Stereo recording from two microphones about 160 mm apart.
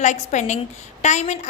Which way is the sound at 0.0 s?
50° left (ahead or behind).